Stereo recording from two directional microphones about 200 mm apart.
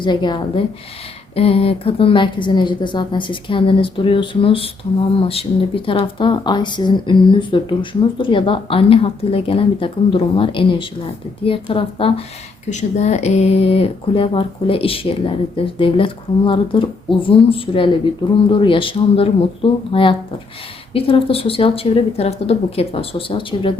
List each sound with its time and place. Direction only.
0.0 s speech: 20° left (ahead or behind)